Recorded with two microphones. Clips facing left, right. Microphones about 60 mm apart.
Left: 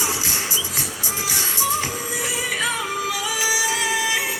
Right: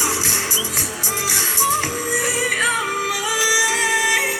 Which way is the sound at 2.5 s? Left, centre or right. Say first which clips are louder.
Right 3 dB; right.